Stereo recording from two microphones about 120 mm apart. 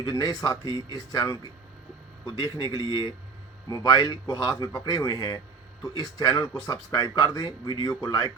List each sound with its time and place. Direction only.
0.0 s speech: 35° left (ahead or behind)